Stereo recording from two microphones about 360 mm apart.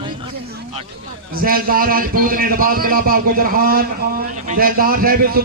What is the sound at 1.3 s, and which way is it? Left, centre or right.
A man's voice, right.